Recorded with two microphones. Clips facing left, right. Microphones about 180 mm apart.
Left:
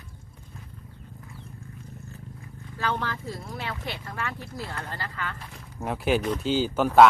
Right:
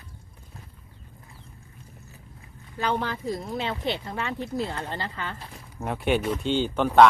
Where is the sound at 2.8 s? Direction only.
20° right (ahead or behind).